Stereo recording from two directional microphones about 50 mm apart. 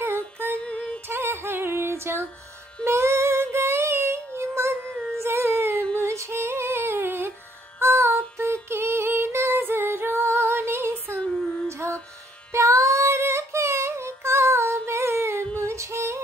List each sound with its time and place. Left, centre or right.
0.6 s music: left
1.0 s music: right
2.8 s child singing: right
5.2 s a sound: right
5.9 s music: right
7.8 s female singing: right
11.1 s a sound: centre
11.7 s music: right
12.5 s female singing: right
15.6 s female singing: right